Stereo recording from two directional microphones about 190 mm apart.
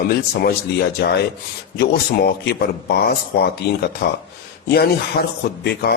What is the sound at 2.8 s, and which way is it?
A man's voice, 55° left (ahead or behind).